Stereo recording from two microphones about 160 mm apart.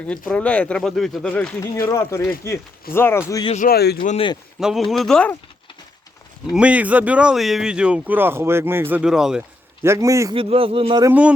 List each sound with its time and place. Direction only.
0.1 s speech: 5° left (ahead or behind)
3.6 s speech: 80° left
4.6 s speech: centre (ahead or behind)
6.5 s speech: 5° right (ahead or behind)
9.8 s a man's voice: 20° right (ahead or behind)
10.3 s speech: 35° right (ahead or behind)